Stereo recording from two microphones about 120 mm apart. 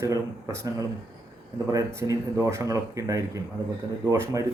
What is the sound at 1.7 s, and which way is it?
A man's voice, 30° right (ahead or behind).